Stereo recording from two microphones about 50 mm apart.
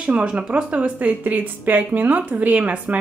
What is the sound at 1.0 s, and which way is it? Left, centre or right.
Speech, right.